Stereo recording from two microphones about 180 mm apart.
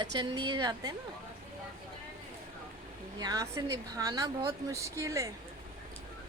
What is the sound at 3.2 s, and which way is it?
A woman's voice, 20° right (ahead or behind).